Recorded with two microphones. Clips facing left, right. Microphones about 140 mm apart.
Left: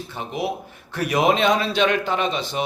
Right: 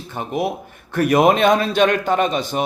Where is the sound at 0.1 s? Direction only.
50° right (ahead or behind).